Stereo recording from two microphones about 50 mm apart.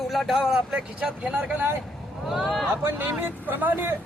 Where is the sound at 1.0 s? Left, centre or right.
Right.